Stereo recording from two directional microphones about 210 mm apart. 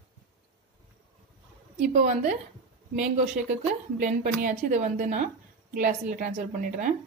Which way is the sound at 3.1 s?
35° right (ahead or behind).